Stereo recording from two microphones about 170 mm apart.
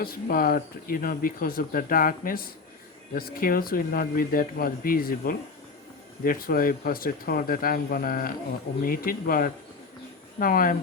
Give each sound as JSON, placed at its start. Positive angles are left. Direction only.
{"t": 0.0, "sound": "speech", "side_deg": 60}